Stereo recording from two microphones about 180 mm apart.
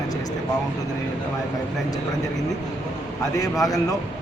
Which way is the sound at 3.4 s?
20° left (ahead or behind).